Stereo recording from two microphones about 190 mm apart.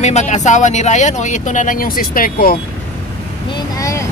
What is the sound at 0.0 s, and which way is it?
Speech, 35° left (ahead or behind).